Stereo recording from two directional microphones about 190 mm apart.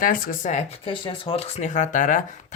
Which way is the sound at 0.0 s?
45° left (ahead or behind).